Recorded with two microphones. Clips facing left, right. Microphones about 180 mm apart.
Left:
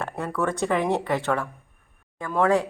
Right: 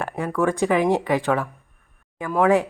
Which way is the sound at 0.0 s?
10° right (ahead or behind).